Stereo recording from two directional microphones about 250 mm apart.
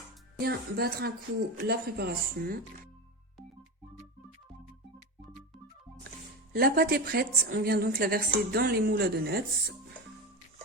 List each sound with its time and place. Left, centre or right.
0.3 s a woman's voice: right
6.5 s a woman's voice: right